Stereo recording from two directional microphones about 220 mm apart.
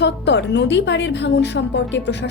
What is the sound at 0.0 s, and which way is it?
A woman's voice, 50° left (ahead or behind).